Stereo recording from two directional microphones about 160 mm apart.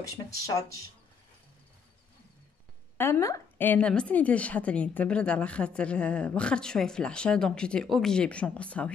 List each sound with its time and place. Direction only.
0.0 s speech: 20° left (ahead or behind)
3.0 s a woman's voice: 20° left (ahead or behind)